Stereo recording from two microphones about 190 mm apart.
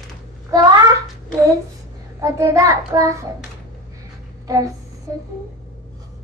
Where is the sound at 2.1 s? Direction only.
15° right (ahead or behind).